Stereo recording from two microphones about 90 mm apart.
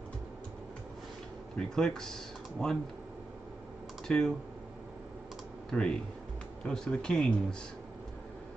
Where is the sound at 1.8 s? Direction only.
5° left (ahead or behind).